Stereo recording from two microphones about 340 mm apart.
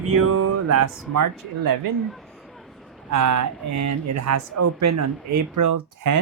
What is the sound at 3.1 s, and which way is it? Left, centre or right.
Speech, right.